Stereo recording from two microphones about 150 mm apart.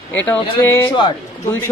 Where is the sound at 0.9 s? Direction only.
30° left (ahead or behind).